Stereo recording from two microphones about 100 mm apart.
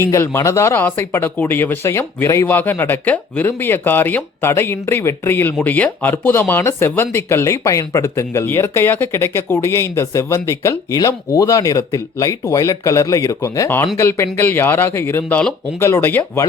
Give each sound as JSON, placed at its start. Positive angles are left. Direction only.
{"t": 0.0, "sound": "speech", "side_deg": 30}